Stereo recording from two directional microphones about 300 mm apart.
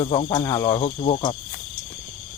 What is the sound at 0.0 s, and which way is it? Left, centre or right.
Speech, centre.